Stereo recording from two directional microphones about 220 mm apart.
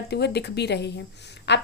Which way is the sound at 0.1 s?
50° left (ahead or behind).